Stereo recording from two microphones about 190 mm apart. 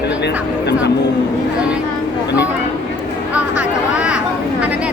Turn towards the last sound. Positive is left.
turn(degrees=-5)  # may be behind; listen again after turning